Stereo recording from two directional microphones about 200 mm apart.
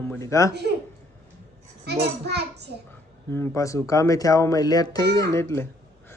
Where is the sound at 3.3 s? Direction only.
15° left (ahead or behind).